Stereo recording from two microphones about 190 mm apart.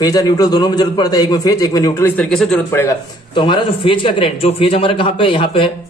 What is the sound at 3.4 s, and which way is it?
A man's voice, 25° left (ahead or behind).